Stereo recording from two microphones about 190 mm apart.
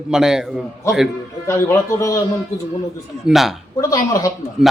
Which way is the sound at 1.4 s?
15° left (ahead or behind).